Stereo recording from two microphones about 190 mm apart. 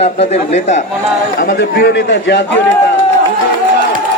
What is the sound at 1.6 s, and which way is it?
Speech, 65° left (ahead or behind).